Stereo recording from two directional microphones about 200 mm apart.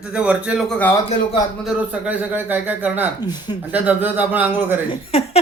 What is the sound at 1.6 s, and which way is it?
A man's voice, 5° right (ahead or behind).